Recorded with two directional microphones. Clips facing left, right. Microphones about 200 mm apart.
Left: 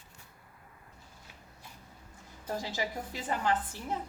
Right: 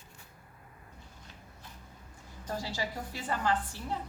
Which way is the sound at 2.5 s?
20° left (ahead or behind).